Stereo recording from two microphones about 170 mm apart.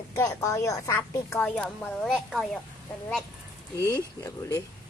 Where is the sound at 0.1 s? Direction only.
20° left (ahead or behind); by 2.5 s centre (ahead or behind).